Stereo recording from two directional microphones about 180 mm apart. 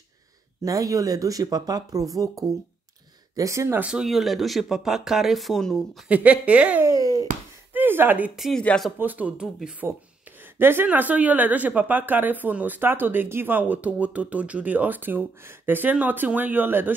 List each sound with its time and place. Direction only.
0.7 s speech: 20° right (ahead or behind); by 8.9 s 5° left (ahead or behind)
8.9 s speech: 10° right (ahead or behind)